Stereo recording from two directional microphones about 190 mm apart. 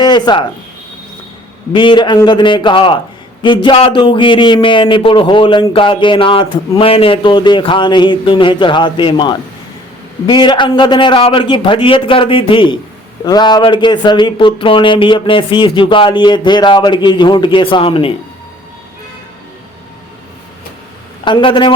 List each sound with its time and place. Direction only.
0.0 s speech: 25° left (ahead or behind)
1.7 s speech: 25° left (ahead or behind)
21.2 s speech: 25° left (ahead or behind)